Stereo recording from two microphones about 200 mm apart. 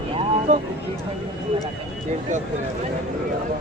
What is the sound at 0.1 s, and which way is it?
Vehicle, 35° right (ahead or behind).